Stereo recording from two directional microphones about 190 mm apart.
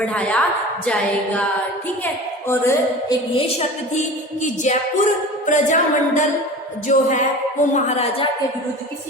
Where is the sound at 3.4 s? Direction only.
35° left (ahead or behind).